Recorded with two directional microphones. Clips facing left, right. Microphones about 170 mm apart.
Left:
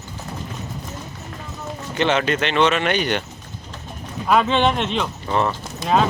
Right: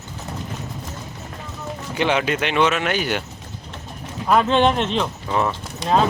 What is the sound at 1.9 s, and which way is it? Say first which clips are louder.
Speech: left 1 dB; 10° right (ahead or behind).